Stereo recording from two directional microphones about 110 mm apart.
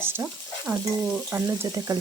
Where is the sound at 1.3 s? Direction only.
20° right (ahead or behind).